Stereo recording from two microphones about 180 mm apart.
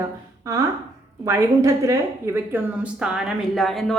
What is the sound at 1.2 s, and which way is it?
Speech, 15° right (ahead or behind).